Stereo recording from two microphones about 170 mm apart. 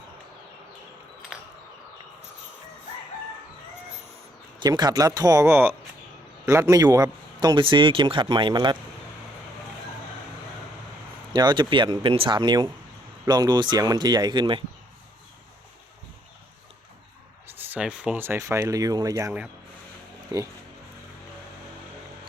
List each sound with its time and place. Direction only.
4.6 s a man's voice: 25° right (ahead or behind)
11.3 s a man's voice: 25° right (ahead or behind)
17.7 s speech: 5° right (ahead or behind)
20.3 s a man's voice: 20° right (ahead or behind)